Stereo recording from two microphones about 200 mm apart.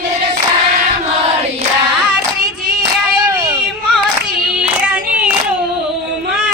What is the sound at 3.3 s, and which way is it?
Hubbub, 20° right (ahead or behind).